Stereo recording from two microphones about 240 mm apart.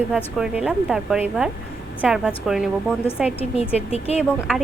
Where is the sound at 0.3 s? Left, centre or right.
Centre.